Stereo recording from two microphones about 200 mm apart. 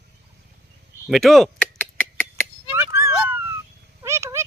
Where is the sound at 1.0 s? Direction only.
Centre (ahead or behind).